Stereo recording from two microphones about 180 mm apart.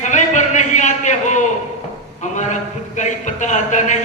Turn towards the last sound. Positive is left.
turn(degrees=45)  # may be behind; listen again after turning